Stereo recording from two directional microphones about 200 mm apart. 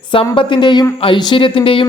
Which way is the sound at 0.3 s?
25° left (ahead or behind).